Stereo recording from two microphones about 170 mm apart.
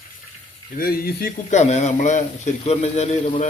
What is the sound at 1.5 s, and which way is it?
A man's voice, 40° left (ahead or behind).